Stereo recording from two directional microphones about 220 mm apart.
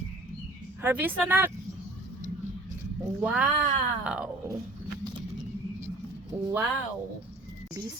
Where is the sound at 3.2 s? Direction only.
5° right (ahead or behind).